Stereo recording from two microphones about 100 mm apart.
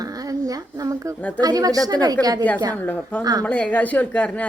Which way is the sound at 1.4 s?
40° right (ahead or behind).